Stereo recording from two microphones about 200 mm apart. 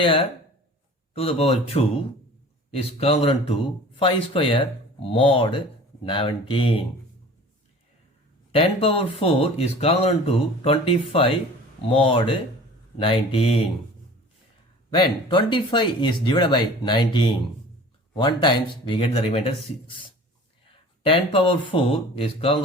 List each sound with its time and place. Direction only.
0.0 s speech: 25° left (ahead or behind)
8.5 s speech: 30° left (ahead or behind)
14.9 s speech: 25° left (ahead or behind)